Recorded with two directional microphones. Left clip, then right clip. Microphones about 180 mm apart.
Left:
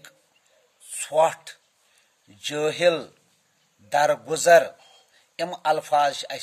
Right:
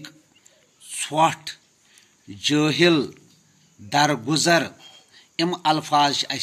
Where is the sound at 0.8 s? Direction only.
45° left (ahead or behind).